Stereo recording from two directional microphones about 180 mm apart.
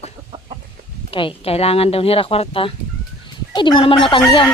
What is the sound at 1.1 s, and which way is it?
A woman's voice, 30° left (ahead or behind).